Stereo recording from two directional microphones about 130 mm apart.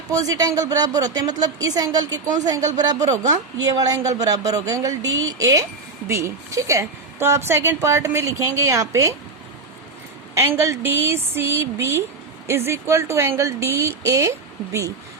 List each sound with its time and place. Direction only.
0.1 s a woman's voice: 25° right (ahead or behind)
10.3 s a woman's voice: 20° right (ahead or behind)